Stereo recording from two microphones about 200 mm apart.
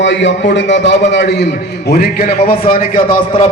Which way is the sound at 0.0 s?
65° left (ahead or behind).